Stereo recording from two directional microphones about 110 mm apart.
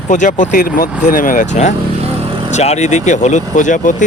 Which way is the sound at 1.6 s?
90° left.